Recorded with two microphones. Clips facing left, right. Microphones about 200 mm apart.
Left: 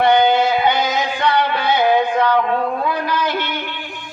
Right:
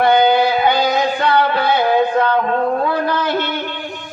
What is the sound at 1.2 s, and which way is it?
Music, 20° left (ahead or behind).